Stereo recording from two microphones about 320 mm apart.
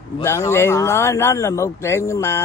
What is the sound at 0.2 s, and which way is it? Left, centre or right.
A man's voice, centre.